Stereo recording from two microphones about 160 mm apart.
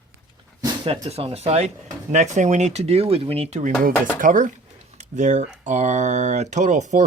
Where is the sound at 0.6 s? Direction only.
35° right (ahead or behind).